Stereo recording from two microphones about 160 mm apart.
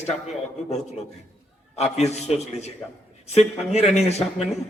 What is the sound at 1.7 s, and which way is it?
A man's voice, 40° left (ahead or behind).